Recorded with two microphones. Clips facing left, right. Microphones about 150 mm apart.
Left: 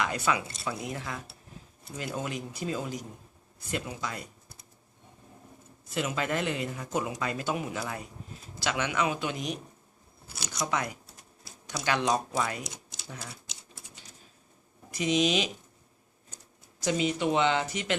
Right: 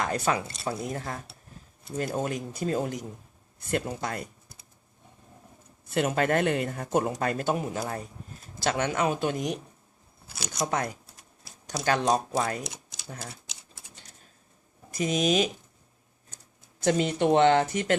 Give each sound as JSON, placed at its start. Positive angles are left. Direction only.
{"t": 0.0, "sound": "speech", "side_deg": -45}
{"t": 5.9, "sound": "speech", "side_deg": -55}
{"t": 10.7, "sound": "speech", "side_deg": -45}
{"t": 14.9, "sound": "speech", "side_deg": -45}
{"t": 16.8, "sound": "speech", "side_deg": -55}